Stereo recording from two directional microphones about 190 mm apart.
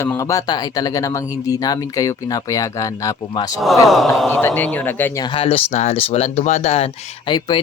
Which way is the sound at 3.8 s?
Centre (ahead or behind).